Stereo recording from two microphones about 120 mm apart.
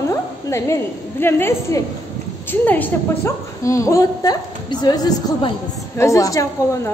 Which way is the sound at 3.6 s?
25° left (ahead or behind).